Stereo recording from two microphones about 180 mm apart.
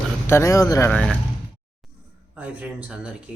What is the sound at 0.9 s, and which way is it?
Speech, 5° left (ahead or behind).